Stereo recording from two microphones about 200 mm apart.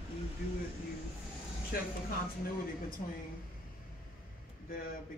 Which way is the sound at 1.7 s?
50° left (ahead or behind).